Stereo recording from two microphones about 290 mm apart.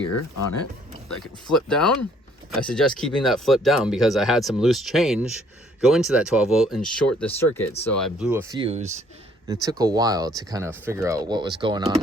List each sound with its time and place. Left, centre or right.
0.1 s speech: left
1.1 s speech: centre; by 9.0 s right
9.5 s speech: centre